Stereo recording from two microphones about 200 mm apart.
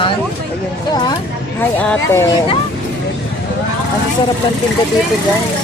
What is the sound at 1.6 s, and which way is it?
Speech, 10° left (ahead or behind).